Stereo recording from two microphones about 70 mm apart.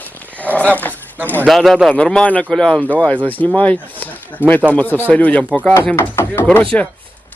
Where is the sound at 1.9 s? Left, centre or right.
Centre.